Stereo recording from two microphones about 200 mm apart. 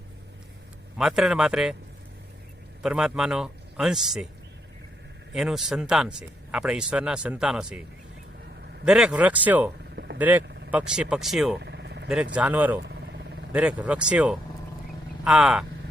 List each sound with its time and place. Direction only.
0.9 s speech: centre (ahead or behind)
2.8 s speech: 5° right (ahead or behind)
5.3 s speech: centre (ahead or behind)
8.8 s speech: 5° right (ahead or behind)
9.9 s vehicle: 55° right (ahead or behind)
10.2 s speech: 10° right (ahead or behind)
11.6 s vehicle: 60° right (ahead or behind)
12.0 s speech: 5° right (ahead or behind)